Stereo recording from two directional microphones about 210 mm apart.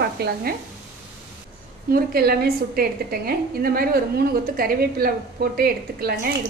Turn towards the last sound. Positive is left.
turn(degrees=-45)  # may be behind; listen again after turning